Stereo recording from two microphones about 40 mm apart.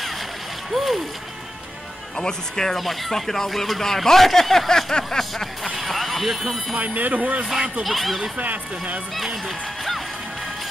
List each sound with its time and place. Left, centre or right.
0.7 s music: centre
2.1 s speech: centre
2.8 s speech: centre
5.8 s speech: centre
6.8 s speech: right
7.8 s speech: centre
8.4 s speech: right
9.1 s speech: centre